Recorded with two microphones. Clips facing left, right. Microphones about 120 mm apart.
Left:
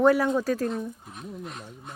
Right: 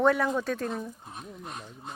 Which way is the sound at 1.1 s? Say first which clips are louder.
Left 3 dB; 20° right (ahead or behind).